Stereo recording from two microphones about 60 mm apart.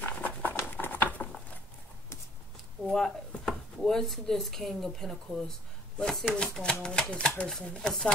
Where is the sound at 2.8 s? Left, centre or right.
Centre.